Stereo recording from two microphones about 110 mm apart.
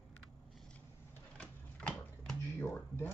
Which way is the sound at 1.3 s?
10° left (ahead or behind).